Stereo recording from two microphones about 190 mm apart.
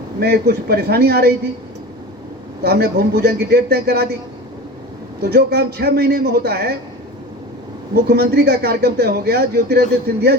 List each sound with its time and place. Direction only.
0.2 s a man's voice: 55° right (ahead or behind)
2.6 s a man's voice: 55° right (ahead or behind)
5.2 s a man's voice: 55° right (ahead or behind)
7.9 s a man's voice: 55° right (ahead or behind)